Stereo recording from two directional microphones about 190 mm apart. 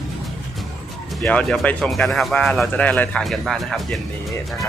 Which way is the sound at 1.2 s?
5° left (ahead or behind).